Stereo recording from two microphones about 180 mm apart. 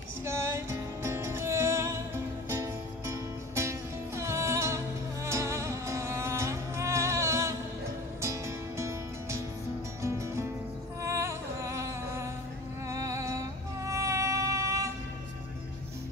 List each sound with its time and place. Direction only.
0.2 s music: 15° right (ahead or behind)